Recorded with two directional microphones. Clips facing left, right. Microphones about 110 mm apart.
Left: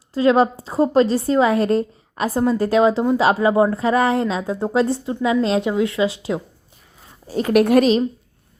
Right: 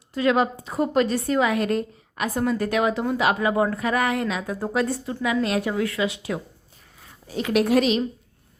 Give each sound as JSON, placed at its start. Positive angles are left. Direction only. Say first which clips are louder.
{"t": 0.1, "sound": "a woman's voice", "louder": "left 5 dB", "side_deg": 30}
{"t": 7.3, "sound": "a woman's voice", "louder": "left 6 dB", "side_deg": 40}
{"t": 7.6, "sound": "a woman's voice", "louder": "left 5 dB", "side_deg": 55}